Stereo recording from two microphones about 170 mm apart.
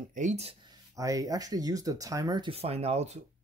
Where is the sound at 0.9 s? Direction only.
20° right (ahead or behind).